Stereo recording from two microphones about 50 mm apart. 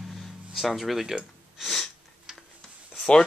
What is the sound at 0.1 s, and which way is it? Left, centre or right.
Music, centre.